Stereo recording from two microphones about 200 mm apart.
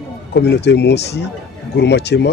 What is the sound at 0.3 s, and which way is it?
Speech, 60° left (ahead or behind).